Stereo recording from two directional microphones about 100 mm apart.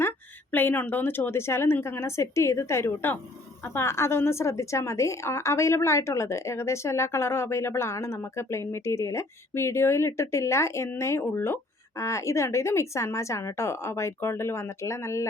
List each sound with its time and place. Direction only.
0.5 s a woman's voice: 20° left (ahead or behind)